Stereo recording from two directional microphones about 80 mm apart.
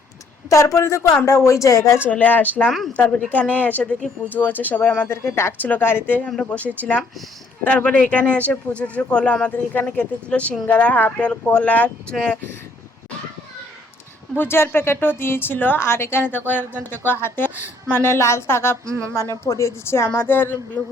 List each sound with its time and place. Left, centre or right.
0.5 s a woman's voice: left
2.0 s a woman's voice: centre
2.6 s speech: centre
2.9 s a woman's voice: centre
5.0 s a woman's voice: left; by 12.4 s centre
14.3 s a woman's voice: left
18.9 s a sound: right
19.5 s a woman's voice: left